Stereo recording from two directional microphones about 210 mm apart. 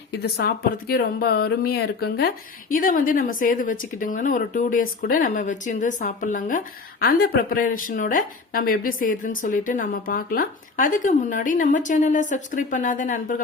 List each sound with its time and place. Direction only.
0.2 s speech: 50° left (ahead or behind)